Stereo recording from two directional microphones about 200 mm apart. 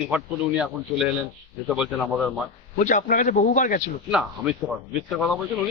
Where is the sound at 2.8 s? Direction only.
40° left (ahead or behind).